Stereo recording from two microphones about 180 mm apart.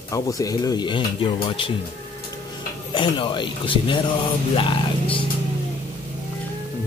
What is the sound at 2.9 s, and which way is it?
Speech, 25° left (ahead or behind).